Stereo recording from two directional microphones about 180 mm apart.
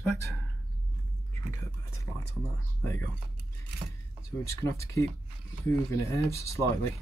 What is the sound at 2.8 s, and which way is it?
Speech, 15° left (ahead or behind).